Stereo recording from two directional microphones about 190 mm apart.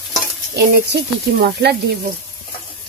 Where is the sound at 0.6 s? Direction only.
60° right (ahead or behind).